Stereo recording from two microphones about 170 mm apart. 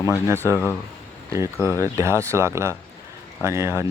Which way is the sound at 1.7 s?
15° right (ahead or behind).